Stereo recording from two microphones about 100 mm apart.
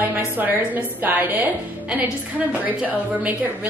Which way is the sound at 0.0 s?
15° right (ahead or behind).